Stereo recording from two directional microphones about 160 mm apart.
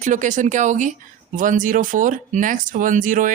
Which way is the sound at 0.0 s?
50° right (ahead or behind).